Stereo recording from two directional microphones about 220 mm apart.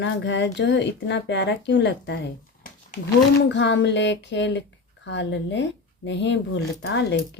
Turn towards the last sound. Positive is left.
turn(degrees=55)  # may be behind; listen again after turning